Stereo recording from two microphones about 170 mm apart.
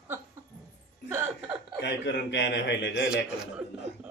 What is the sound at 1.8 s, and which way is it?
A man's voice, 90° left.